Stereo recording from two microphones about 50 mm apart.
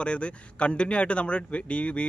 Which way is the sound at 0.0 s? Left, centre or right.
Left.